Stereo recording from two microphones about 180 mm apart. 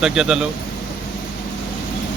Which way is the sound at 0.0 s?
5° right (ahead or behind).